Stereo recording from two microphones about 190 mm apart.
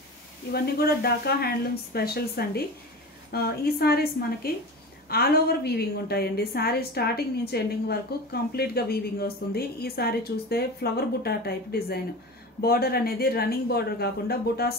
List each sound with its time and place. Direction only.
0.5 s a woman's voice: 55° left (ahead or behind)